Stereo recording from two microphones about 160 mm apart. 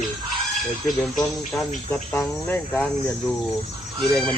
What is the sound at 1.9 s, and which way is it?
Speech, 10° left (ahead or behind).